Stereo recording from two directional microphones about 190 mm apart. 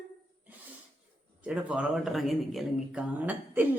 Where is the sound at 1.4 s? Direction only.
5° right (ahead or behind).